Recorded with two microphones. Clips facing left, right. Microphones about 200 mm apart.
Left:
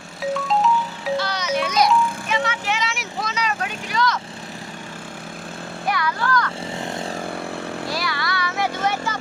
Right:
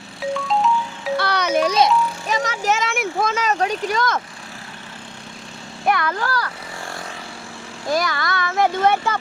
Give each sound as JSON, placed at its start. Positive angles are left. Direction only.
{"t": 0.2, "sound": "music", "side_deg": 0}
{"t": 1.1, "sound": "music", "side_deg": -60}
{"t": 1.6, "sound": "music", "side_deg": -30}
{"t": 2.2, "sound": "vehicle", "side_deg": -40}
{"t": 5.8, "sound": "speech", "side_deg": -55}
{"t": 6.8, "sound": "vehicle", "side_deg": 20}
{"t": 7.9, "sound": "speech", "side_deg": -45}